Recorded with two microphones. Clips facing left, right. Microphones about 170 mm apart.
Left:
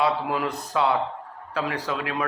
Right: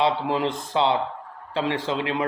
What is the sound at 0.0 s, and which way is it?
A man's voice, 25° right (ahead or behind).